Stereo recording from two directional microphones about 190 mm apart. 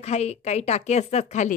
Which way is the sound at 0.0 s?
35° left (ahead or behind).